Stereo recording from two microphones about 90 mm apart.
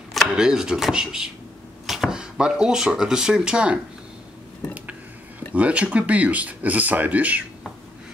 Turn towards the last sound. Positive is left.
turn(degrees=-15)  # may be behind; listen again after turning